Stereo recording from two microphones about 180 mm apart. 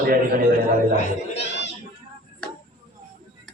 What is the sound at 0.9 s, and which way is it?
Speech, 35° left (ahead or behind).